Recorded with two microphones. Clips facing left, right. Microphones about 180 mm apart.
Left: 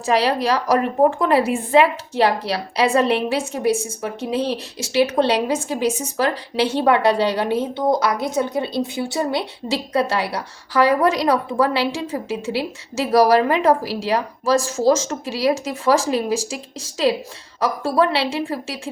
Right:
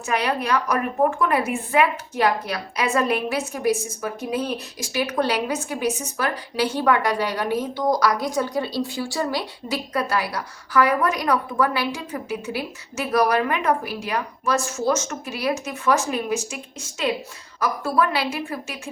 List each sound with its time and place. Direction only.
0.0 s a woman's voice: 30° left (ahead or behind)